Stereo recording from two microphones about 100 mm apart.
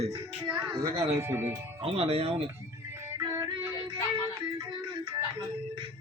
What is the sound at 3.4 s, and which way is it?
Music, 65° right (ahead or behind).